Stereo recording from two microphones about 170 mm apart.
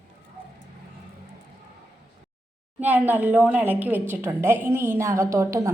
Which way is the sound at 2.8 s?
10° right (ahead or behind).